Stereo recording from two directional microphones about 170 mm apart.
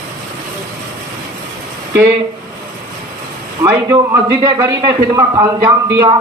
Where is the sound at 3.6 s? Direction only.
20° right (ahead or behind).